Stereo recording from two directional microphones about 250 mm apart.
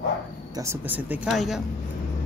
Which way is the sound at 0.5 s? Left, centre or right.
Centre.